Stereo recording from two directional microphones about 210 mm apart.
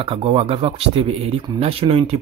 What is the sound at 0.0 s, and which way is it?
Speech, 25° right (ahead or behind).